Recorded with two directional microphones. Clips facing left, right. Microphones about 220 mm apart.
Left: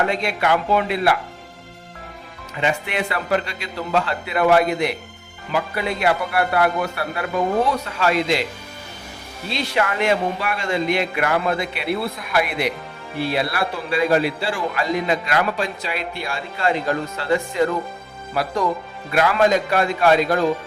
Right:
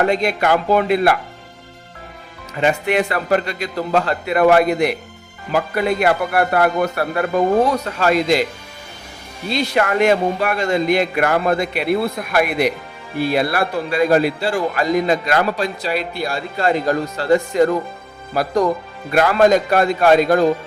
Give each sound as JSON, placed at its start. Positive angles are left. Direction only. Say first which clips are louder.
{"t": 0.1, "sound": "a man's voice", "louder": "right 4 dB", "side_deg": -40}
{"t": 2.6, "sound": "a man's voice", "louder": "right 6 dB", "side_deg": -45}
{"t": 9.5, "sound": "a man's voice", "louder": "right 5 dB", "side_deg": -45}